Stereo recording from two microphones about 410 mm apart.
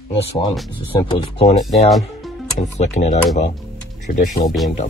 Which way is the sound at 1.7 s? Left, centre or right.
Centre.